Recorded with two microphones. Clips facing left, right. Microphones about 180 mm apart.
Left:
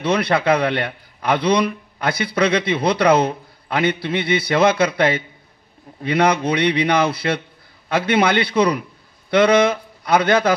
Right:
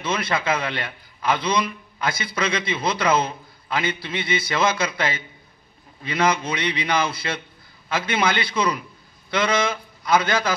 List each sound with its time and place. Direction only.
0.0 s a man's voice: 65° left (ahead or behind)